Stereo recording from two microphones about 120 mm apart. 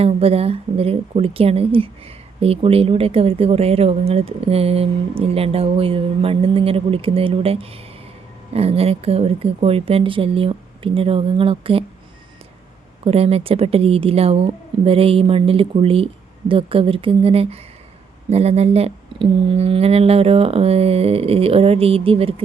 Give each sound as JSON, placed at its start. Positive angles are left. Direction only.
{"t": 0.0, "sound": "speech", "side_deg": -55}
{"t": 13.1, "sound": "speech", "side_deg": -55}